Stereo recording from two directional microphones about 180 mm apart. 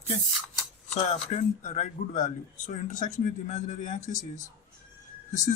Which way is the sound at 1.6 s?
40° left (ahead or behind).